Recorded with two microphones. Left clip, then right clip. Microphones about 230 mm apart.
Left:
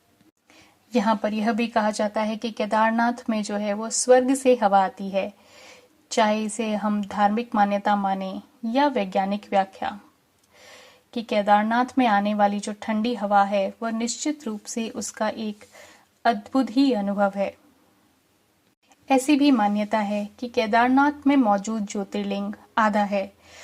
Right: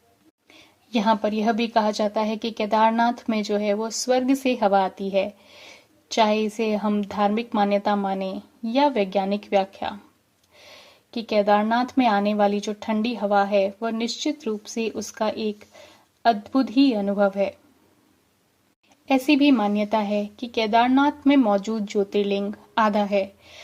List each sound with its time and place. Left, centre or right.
0.9 s speech: left
19.0 s speech: left